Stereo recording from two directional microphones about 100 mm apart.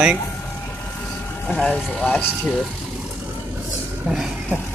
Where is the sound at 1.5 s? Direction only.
10° left (ahead or behind).